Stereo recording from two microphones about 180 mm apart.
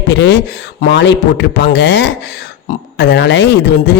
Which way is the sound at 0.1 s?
75° left (ahead or behind).